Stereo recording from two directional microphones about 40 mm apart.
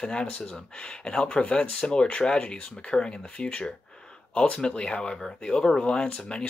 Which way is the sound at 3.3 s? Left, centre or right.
Left.